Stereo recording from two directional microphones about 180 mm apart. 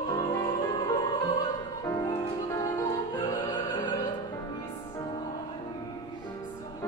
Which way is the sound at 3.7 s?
20° left (ahead or behind).